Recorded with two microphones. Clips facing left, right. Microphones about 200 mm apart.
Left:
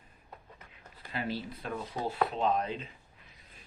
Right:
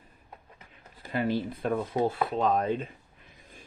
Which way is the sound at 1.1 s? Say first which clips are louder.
Right 7 dB; 50° right (ahead or behind).